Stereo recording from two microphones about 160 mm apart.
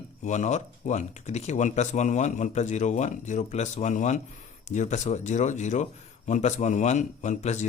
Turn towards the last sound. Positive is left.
turn(degrees=45)  # may be behind; listen again after turning